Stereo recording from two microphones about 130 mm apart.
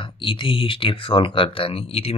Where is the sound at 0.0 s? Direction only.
40° left (ahead or behind).